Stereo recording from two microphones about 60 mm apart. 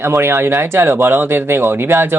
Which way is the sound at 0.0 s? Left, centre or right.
Right.